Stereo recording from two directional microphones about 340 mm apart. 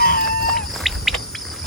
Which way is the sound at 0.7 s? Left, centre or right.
Centre.